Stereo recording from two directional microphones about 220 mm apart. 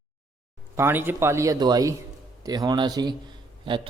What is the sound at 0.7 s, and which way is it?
A man's voice, 10° right (ahead or behind).